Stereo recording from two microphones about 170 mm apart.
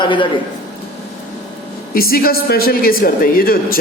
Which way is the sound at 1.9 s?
60° left (ahead or behind).